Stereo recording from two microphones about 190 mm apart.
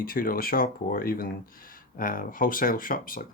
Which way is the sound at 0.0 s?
50° left (ahead or behind).